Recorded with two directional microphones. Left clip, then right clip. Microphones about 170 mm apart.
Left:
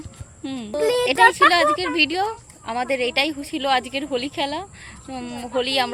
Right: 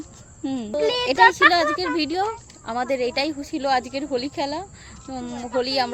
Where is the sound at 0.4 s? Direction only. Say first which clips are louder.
Right 3 dB; 50° right (ahead or behind).